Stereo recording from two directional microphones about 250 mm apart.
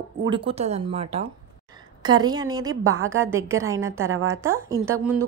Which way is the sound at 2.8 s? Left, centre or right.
Right.